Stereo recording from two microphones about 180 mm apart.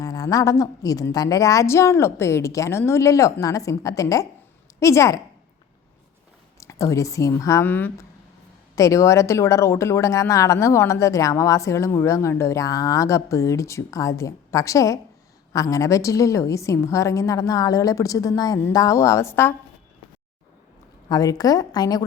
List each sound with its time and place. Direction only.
0.0 s speech: 20° left (ahead or behind)
6.6 s speech: 15° left (ahead or behind)
21.1 s a woman's voice: 20° left (ahead or behind)